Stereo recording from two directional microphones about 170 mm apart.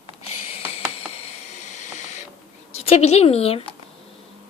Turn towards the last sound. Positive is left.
turn(degrees=35)  # may be behind; listen again after turning